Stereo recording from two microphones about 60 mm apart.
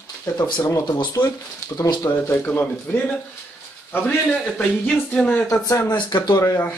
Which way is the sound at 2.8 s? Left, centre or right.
Left.